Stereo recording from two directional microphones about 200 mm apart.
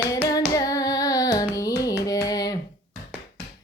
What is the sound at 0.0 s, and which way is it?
Hands, 15° left (ahead or behind).